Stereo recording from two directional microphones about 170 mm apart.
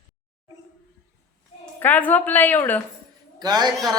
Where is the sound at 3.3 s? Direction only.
25° right (ahead or behind).